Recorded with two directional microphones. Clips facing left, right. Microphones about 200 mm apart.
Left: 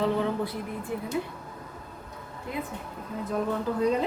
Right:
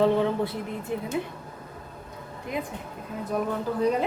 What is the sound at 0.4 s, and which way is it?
Speech, 25° right (ahead or behind).